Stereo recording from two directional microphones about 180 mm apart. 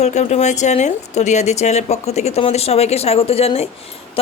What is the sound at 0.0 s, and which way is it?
Speech, 40° left (ahead or behind).